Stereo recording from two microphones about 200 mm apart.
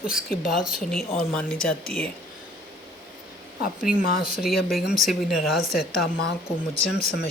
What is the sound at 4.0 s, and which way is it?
Speech, 45° left (ahead or behind).